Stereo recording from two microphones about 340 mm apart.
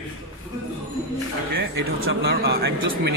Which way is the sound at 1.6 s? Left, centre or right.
Right.